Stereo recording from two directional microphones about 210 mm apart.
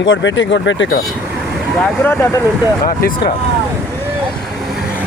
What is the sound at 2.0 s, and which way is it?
Speech, 10° left (ahead or behind).